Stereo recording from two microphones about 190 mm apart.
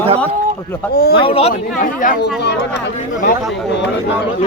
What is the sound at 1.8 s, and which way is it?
Speech, 45° left (ahead or behind).